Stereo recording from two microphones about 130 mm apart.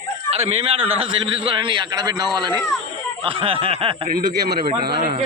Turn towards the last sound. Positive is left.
turn(degrees=-45)  # may be behind; listen again after turning